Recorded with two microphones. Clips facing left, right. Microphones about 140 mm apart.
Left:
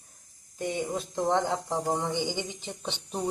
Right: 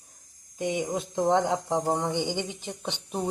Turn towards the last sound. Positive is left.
turn(degrees=-10)  # may be behind; listen again after turning